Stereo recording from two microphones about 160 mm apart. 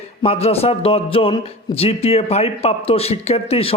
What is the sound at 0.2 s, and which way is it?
A man's voice, 40° left (ahead or behind).